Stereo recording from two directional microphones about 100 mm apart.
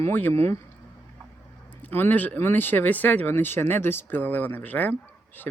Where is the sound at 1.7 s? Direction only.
20° left (ahead or behind).